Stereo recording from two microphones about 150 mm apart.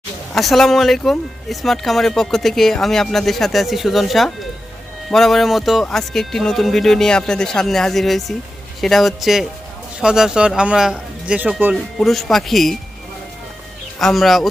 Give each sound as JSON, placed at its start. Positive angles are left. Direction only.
{"t": 0.3, "sound": "speech", "side_deg": 0}
{"t": 14.0, "sound": "speech", "side_deg": 0}